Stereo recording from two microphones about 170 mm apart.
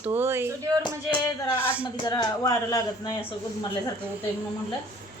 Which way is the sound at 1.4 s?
15° left (ahead or behind).